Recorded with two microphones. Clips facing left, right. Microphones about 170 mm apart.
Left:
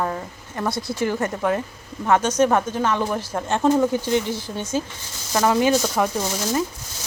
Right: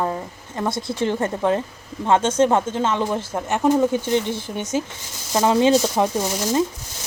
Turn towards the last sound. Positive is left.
turn(degrees=-15)  # may be behind; listen again after turning